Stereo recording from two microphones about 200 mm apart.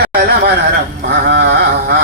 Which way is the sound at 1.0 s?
55° right (ahead or behind).